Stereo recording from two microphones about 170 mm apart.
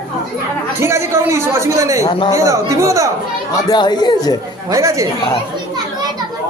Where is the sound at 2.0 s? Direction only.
25° left (ahead or behind).